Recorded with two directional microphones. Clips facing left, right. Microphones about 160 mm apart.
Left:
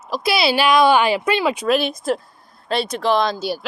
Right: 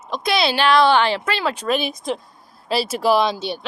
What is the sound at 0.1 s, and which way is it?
Speech, 5° left (ahead or behind).